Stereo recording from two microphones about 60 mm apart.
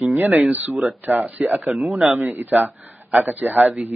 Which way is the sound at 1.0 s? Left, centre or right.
Right.